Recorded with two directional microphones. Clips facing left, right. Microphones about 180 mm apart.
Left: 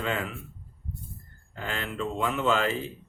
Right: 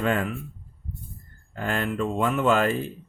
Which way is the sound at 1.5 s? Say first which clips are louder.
Right 7 dB; 50° right (ahead or behind).